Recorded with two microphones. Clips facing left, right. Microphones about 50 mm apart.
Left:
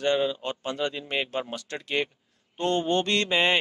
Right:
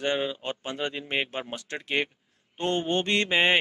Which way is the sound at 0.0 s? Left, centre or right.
Right.